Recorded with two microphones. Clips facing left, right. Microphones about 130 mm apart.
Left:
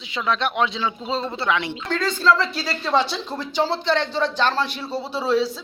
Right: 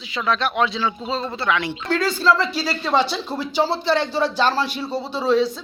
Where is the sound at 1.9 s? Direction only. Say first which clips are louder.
Right 1 dB; 5° right (ahead or behind).